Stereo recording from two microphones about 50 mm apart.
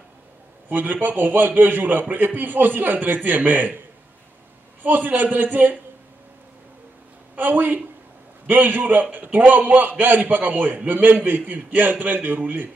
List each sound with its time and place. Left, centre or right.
0.7 s a man's voice: right
4.8 s a man's voice: right
7.3 s a man's voice: right